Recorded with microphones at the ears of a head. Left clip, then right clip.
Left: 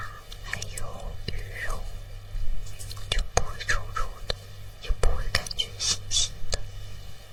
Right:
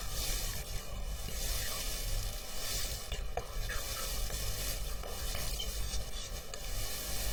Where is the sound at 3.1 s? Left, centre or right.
Left.